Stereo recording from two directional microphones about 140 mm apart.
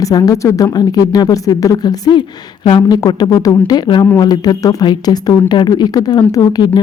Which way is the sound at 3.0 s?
25° left (ahead or behind).